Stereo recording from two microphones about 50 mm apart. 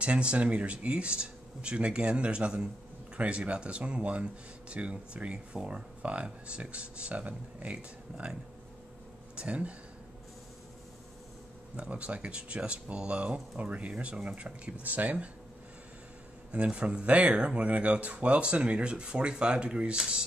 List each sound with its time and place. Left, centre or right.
0.0 s speech: right
11.7 s speech: right
16.5 s speech: right
17.3 s speech: centre